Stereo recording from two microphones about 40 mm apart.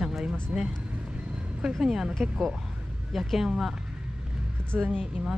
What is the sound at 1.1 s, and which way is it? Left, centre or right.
Vehicle, right.